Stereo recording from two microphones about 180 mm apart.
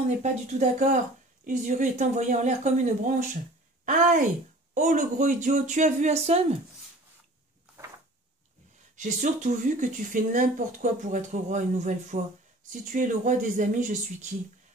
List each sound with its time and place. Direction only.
0.2 s speech: 40° right (ahead or behind)
8.9 s speech: 45° right (ahead or behind)